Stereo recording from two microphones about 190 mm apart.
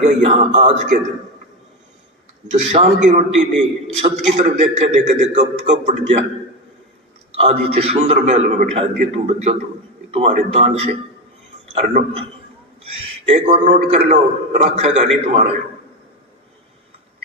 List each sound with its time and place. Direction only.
0.0 s speech: 35° right (ahead or behind)
2.5 s speech: 40° right (ahead or behind)
7.3 s speech: 30° right (ahead or behind)
13.2 s speech: 35° right (ahead or behind)